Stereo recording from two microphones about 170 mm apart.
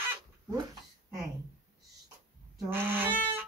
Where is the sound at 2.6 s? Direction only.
10° right (ahead or behind).